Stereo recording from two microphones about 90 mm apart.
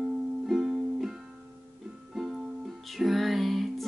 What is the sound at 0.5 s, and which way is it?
Music, 5° right (ahead or behind).